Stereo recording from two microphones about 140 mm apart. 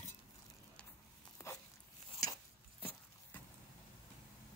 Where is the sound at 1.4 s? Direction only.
20° left (ahead or behind).